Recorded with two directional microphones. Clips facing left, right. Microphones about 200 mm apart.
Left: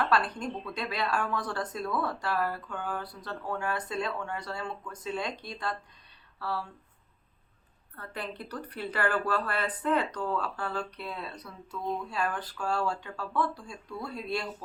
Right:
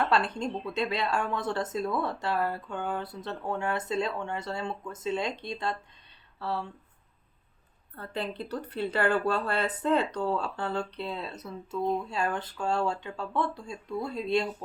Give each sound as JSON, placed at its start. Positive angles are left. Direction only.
{"t": 0.0, "sound": "speech", "side_deg": -25}
{"t": 7.9, "sound": "speech", "side_deg": -25}